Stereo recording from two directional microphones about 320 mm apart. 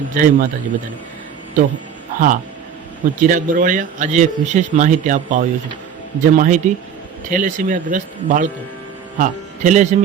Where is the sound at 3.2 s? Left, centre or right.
Right.